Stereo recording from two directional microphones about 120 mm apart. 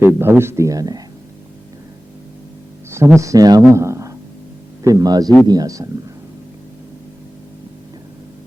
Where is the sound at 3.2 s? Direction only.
30° right (ahead or behind).